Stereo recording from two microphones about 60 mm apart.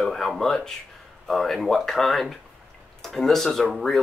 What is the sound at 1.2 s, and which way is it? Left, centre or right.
Speech, centre.